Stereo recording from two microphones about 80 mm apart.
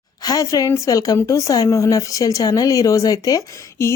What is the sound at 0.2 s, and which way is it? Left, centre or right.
A woman's voice, left.